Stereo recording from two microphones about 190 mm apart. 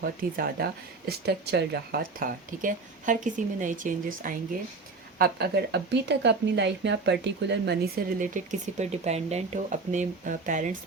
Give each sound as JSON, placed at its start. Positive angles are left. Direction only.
{"t": 0.0, "sound": "speech", "side_deg": -50}
{"t": 5.1, "sound": "a woman's voice", "side_deg": -55}
{"t": 8.2, "sound": "speech", "side_deg": -45}